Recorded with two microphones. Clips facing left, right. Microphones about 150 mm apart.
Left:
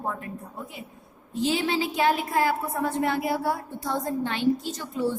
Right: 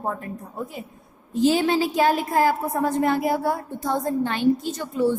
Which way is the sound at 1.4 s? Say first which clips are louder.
Right 6 dB; 45° right (ahead or behind).